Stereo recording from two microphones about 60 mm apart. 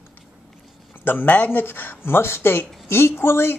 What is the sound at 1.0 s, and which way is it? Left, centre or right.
Speech, left.